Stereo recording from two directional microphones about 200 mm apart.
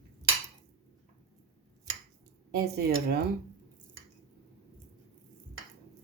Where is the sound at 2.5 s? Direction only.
55° right (ahead or behind).